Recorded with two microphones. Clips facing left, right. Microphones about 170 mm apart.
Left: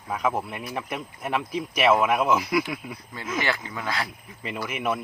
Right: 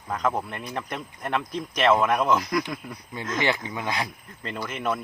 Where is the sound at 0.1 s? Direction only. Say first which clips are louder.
Even; 5° left (ahead or behind).